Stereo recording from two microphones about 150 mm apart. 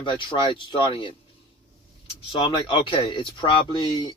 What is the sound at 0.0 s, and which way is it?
Speech, 35° left (ahead or behind).